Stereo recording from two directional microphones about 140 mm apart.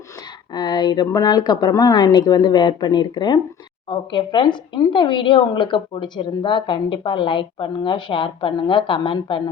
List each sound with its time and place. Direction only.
0.5 s speech: 30° left (ahead or behind)